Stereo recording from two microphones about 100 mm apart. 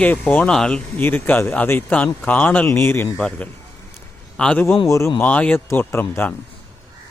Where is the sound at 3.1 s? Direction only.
10° left (ahead or behind).